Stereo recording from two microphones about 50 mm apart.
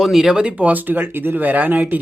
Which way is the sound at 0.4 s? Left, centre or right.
Right.